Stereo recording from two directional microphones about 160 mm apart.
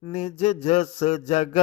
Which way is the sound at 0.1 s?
45° left (ahead or behind).